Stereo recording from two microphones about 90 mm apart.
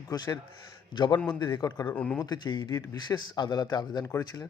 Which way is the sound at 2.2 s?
50° left (ahead or behind).